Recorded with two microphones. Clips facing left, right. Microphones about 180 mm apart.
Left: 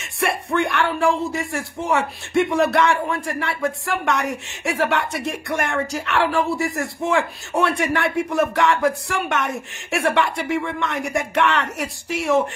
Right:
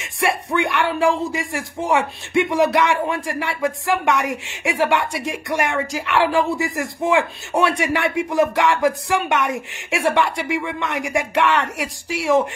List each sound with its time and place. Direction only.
0.0 s speech: 15° right (ahead or behind)